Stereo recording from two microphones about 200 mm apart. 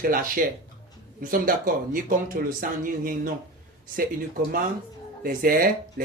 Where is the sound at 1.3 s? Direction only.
45° right (ahead or behind).